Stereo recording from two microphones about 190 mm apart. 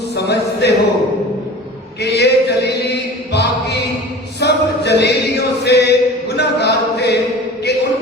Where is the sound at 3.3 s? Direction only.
60° left (ahead or behind).